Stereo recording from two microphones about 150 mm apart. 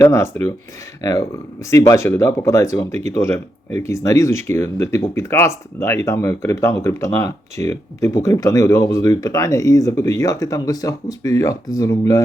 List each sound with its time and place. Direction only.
0.0 s speech: 15° left (ahead or behind)